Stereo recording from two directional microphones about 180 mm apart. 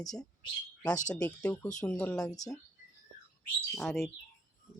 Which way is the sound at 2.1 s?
20° left (ahead or behind).